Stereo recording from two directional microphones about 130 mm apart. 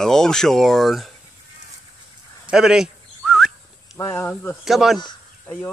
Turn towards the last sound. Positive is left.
turn(degrees=-5)  # may be behind; listen again after turning